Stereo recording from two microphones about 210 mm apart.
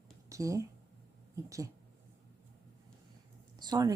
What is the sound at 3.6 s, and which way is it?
Speech, 20° right (ahead or behind).